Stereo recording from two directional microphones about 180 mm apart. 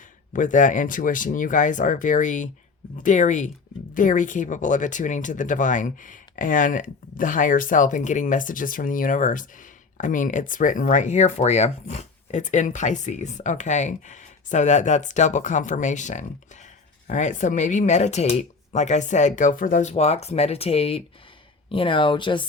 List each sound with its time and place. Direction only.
0.3 s speech: 45° left (ahead or behind); by 22.4 s 25° left (ahead or behind)